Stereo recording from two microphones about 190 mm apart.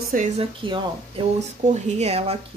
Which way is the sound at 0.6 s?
25° right (ahead or behind).